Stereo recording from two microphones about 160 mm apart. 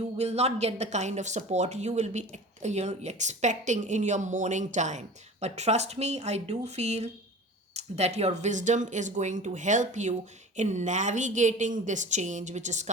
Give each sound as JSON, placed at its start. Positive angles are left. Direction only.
{"t": 0.2, "sound": "speech", "side_deg": -40}